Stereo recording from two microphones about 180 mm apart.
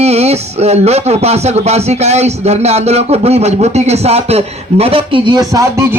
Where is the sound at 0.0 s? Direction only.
35° right (ahead or behind).